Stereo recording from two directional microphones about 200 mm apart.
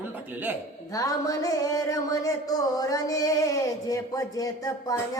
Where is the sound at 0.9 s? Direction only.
15° left (ahead or behind).